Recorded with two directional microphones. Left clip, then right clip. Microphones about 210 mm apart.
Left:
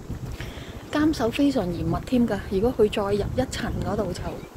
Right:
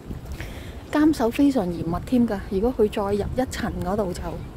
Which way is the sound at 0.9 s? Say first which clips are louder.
Right 3 dB; 25° right (ahead or behind).